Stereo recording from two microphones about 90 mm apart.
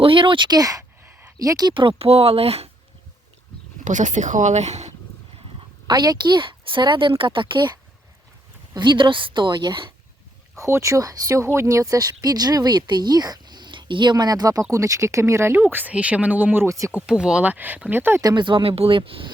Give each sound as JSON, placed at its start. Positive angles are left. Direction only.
{"t": 0.0, "sound": "speech", "side_deg": -70}
{"t": 1.0, "sound": "a sound", "side_deg": -20}
{"t": 1.4, "sound": "speech", "side_deg": -45}
{"t": 1.7, "sound": "speech", "side_deg": -80}
{"t": 5.9, "sound": "speech", "side_deg": -50}
{"t": 8.7, "sound": "speech", "side_deg": -60}
{"t": 10.6, "sound": "speech", "side_deg": -35}
{"t": 15.5, "sound": "speech", "side_deg": -20}
{"t": 16.6, "sound": "speech", "side_deg": -35}
{"t": 17.1, "sound": "speech", "side_deg": -10}
{"t": 18.2, "sound": "speech", "side_deg": -45}
{"t": 18.4, "sound": "speech", "side_deg": -80}